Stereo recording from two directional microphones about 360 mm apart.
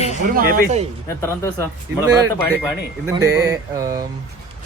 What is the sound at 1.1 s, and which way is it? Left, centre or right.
Speech, centre.